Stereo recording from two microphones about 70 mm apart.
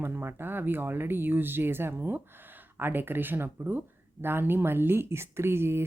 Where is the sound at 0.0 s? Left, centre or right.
Right.